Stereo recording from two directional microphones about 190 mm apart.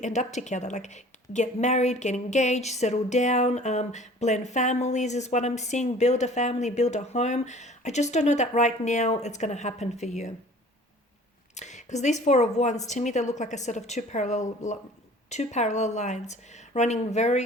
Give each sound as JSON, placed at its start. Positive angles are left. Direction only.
{"t": 0.0, "sound": "a woman's voice", "side_deg": 40}
{"t": 11.5, "sound": "a woman's voice", "side_deg": 40}